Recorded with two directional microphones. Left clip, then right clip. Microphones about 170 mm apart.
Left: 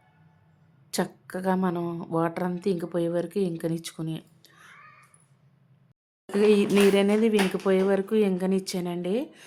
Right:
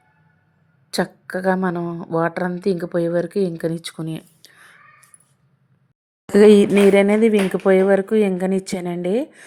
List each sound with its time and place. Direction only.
0.9 s a woman's voice: 20° right (ahead or behind)
6.3 s speech: 45° right (ahead or behind)
6.9 s a woman's voice: 30° right (ahead or behind)